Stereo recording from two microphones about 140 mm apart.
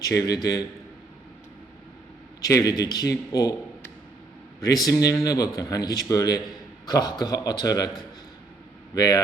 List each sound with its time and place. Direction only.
0.0 s a man's voice: 25° left (ahead or behind)
2.4 s a man's voice: 25° left (ahead or behind)
4.6 s a man's voice: 25° left (ahead or behind)
9.0 s a man's voice: 25° left (ahead or behind)